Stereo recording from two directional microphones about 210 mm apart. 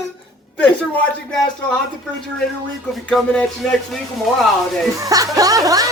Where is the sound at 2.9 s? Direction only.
Centre (ahead or behind).